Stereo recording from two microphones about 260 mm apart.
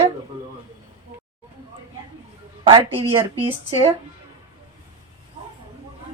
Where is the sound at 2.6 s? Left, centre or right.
Centre.